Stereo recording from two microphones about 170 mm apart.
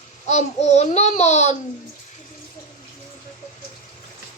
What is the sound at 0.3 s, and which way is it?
A child's voice, 40° left (ahead or behind).